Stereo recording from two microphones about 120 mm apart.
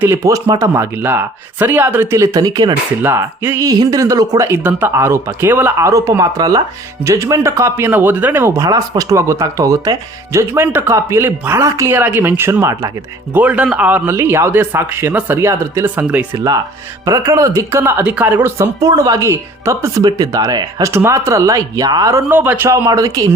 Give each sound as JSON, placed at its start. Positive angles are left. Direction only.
{"t": 0.0, "sound": "speech", "side_deg": -20}
{"t": 3.0, "sound": "speech", "side_deg": -20}
{"t": 4.4, "sound": "speech", "side_deg": -20}
{"t": 11.9, "sound": "speech", "side_deg": -15}
{"t": 13.3, "sound": "speech", "side_deg": -10}
{"t": 17.1, "sound": "speech", "side_deg": -25}
{"t": 20.9, "sound": "speech", "side_deg": -20}
{"t": 22.7, "sound": "speech", "side_deg": -25}